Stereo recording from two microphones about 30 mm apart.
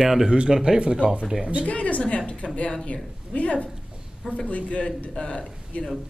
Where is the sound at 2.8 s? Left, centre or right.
Left.